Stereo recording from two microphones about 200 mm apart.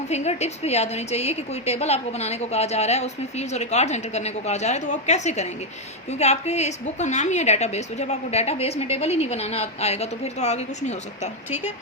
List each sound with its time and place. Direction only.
0.1 s a woman's voice: 35° left (ahead or behind)